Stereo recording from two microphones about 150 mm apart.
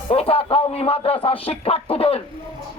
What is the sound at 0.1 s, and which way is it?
A man's voice, 40° left (ahead or behind).